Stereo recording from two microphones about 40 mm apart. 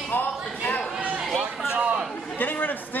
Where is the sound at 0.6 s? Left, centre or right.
Left.